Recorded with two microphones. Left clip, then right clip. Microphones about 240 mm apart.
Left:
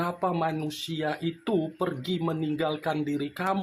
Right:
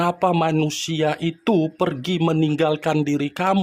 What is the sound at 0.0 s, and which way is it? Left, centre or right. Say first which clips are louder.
Speech: right 8 dB; right.